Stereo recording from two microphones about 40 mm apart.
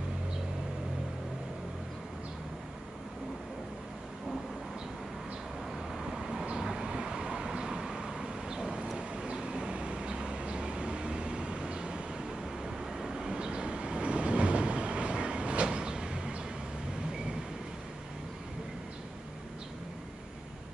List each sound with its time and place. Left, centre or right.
5.9 s vehicle: centre